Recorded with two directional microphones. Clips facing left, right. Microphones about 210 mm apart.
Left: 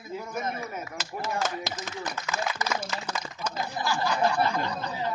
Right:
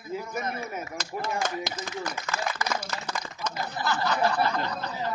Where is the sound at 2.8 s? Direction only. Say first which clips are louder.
Left 1 dB; 10° left (ahead or behind).